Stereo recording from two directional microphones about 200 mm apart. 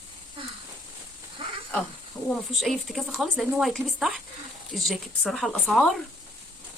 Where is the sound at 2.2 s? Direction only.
Centre (ahead or behind).